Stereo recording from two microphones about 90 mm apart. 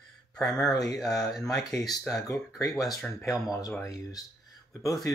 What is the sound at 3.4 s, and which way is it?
Speech, 45° left (ahead or behind).